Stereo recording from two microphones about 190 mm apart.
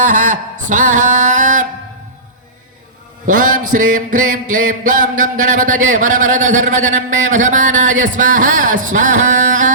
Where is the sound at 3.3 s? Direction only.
45° right (ahead or behind).